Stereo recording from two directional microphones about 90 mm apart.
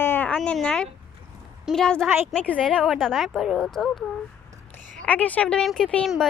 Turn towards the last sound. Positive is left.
turn(degrees=10)  # may be behind; listen again after turning